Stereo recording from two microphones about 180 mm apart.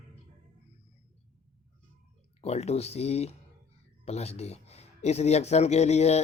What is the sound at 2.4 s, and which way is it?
A man's voice, 35° left (ahead or behind).